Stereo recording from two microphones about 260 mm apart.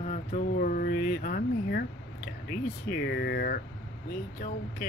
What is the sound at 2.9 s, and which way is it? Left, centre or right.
Speech, left.